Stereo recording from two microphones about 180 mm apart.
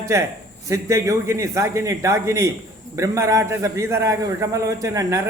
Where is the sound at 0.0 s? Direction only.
15° right (ahead or behind).